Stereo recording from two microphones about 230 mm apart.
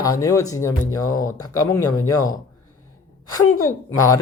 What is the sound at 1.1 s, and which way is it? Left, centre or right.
Speech, left.